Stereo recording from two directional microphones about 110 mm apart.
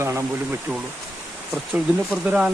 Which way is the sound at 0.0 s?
25° right (ahead or behind).